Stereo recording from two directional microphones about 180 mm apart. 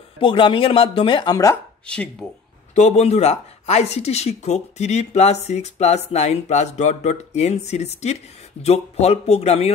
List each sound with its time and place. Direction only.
0.2 s speech: 30° left (ahead or behind)
1.9 s speech: 5° left (ahead or behind)
2.7 s a woman's voice: 40° left (ahead or behind)